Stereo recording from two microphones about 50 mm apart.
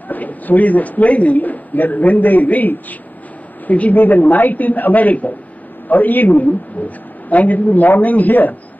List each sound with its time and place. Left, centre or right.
0.1 s a man's voice: left